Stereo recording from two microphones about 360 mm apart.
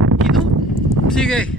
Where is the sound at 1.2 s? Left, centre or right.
Centre.